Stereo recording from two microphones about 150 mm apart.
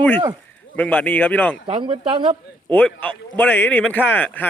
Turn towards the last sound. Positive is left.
turn(degrees=10)  # may be behind; listen again after turning